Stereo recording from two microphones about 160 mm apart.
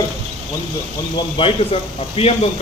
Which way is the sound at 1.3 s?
35° left (ahead or behind).